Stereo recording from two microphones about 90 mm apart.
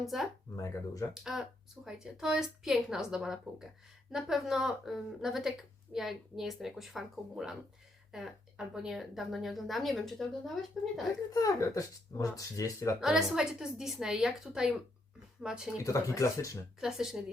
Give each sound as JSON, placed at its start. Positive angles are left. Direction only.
{"t": 0.0, "sound": "speech", "side_deg": 0}
{"t": 0.5, "sound": "speech", "side_deg": 35}
{"t": 1.1, "sound": "speech", "side_deg": -5}
{"t": 11.3, "sound": "speech", "side_deg": 40}
{"t": 13.0, "sound": "speech", "side_deg": -5}
{"t": 15.8, "sound": "speech", "side_deg": 40}
{"t": 16.8, "sound": "speech", "side_deg": -5}